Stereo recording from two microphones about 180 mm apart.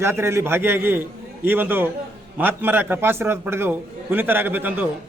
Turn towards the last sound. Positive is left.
turn(degrees=-10)  # may be behind; listen again after turning